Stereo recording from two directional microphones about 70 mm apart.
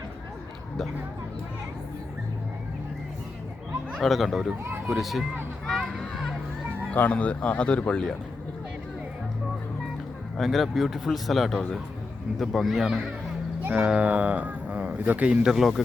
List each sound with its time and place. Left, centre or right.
3.9 s a man's voice: centre
5.6 s music: centre
6.9 s speech: left
10.3 s a man's voice: centre
15.5 s a man's voice: centre